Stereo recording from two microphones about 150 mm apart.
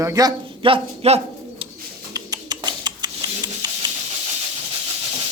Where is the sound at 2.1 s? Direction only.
25° right (ahead or behind).